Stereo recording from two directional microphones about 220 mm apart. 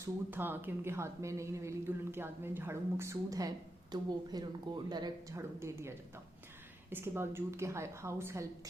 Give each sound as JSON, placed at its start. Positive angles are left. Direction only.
{"t": 0.0, "sound": "speech", "side_deg": -10}
{"t": 6.9, "sound": "speech", "side_deg": -10}